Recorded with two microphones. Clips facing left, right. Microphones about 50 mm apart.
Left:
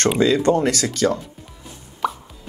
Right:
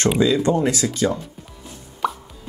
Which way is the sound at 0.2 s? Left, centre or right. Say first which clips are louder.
Left 3 dB; left.